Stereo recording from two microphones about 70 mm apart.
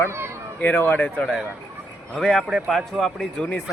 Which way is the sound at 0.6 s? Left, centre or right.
Left.